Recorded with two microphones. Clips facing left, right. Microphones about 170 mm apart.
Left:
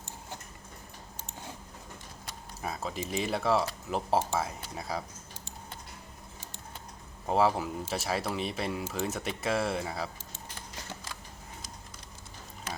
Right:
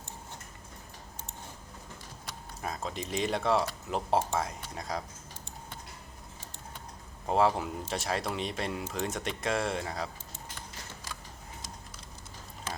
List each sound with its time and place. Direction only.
2.6 s speech: 5° left (ahead or behind)
7.3 s speech: centre (ahead or behind)